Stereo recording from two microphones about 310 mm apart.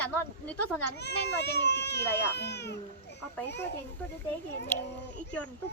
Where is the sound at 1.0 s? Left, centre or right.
Left.